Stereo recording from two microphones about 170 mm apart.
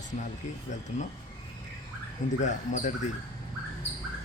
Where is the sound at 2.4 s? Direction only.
45° left (ahead or behind).